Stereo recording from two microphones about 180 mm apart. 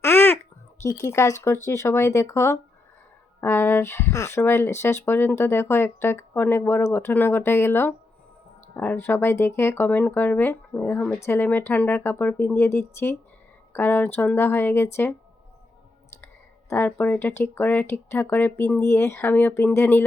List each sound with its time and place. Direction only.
0.0 s babbling: 15° left (ahead or behind)
0.8 s speech: 15° left (ahead or behind)
16.2 s speech: 10° left (ahead or behind)